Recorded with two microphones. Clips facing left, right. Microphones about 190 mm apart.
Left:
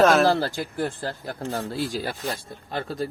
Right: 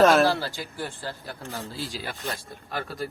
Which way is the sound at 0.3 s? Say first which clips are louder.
Left 4 dB; 45° left (ahead or behind).